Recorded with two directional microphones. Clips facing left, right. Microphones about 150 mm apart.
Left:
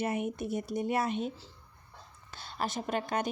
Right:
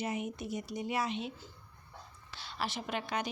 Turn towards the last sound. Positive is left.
turn(degrees=50)  # may be behind; listen again after turning